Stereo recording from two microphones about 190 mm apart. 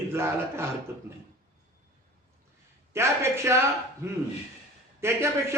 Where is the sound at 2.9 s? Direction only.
15° right (ahead or behind).